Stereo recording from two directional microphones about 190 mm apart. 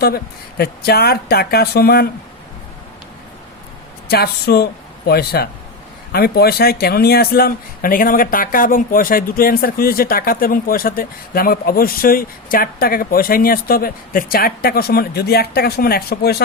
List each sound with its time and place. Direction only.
0.0 s speech: 55° left (ahead or behind)
4.1 s speech: 55° left (ahead or behind)